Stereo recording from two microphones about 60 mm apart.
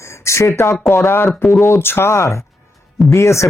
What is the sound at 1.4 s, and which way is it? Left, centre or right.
Speech, centre.